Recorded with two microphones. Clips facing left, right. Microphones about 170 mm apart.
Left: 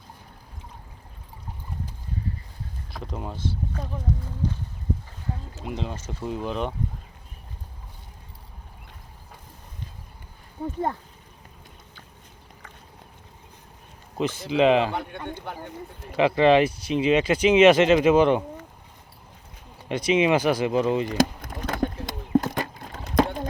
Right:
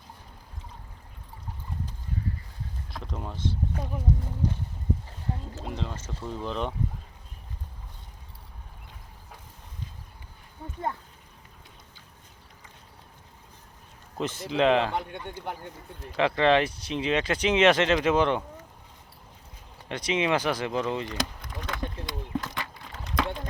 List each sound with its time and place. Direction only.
2.9 s speech: 5° left (ahead or behind)
5.6 s speech: 15° left (ahead or behind)
14.2 s speech: centre (ahead or behind)
16.0 s speech: 10° left (ahead or behind)
19.9 s speech: 10° left (ahead or behind)
21.2 s a sound: 45° left (ahead or behind)